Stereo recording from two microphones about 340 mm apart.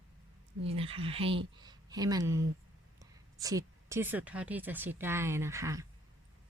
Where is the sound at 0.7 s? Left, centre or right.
Centre.